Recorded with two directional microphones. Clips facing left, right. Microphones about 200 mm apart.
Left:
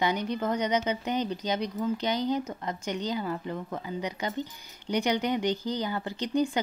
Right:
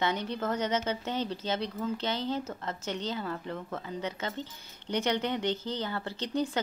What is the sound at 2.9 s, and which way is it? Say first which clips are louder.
Speech: left 3 dB; 15° left (ahead or behind).